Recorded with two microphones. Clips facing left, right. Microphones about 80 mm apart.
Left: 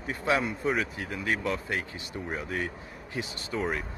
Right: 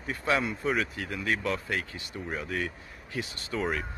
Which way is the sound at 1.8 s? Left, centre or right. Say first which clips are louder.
Left 1 dB; centre.